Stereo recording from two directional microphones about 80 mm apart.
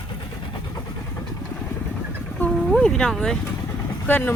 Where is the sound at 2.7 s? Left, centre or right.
Centre.